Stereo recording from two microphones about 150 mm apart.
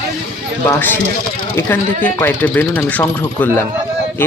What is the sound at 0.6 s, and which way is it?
Speech, 15° left (ahead or behind).